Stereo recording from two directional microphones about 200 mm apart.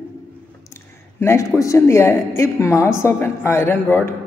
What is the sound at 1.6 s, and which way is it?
A man's voice, 15° left (ahead or behind).